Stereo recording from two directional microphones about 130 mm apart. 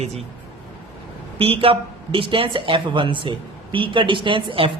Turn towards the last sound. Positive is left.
turn(degrees=-40)  # may be behind; listen again after turning